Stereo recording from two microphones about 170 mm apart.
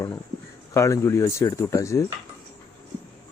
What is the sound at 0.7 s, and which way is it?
Speech, 15° left (ahead or behind).